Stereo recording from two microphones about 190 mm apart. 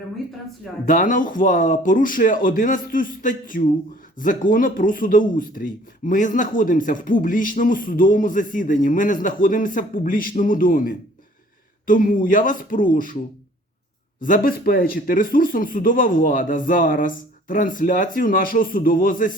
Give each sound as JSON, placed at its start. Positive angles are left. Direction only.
{"t": 0.9, "sound": "speech", "side_deg": 45}
{"t": 14.2, "sound": "speech", "side_deg": 45}